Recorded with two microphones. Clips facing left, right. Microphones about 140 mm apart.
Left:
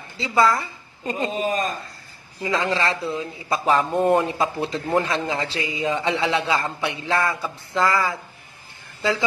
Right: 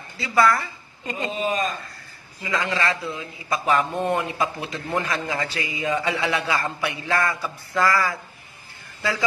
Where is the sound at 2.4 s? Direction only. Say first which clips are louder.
Left 2 dB; 30° left (ahead or behind).